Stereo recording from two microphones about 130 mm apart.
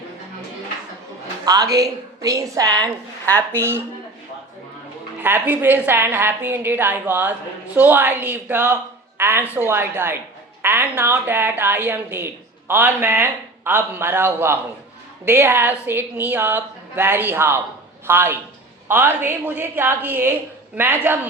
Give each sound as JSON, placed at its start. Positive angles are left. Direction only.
{"t": 1.5, "sound": "a woman's voice", "side_deg": -30}
{"t": 5.2, "sound": "speech", "side_deg": -15}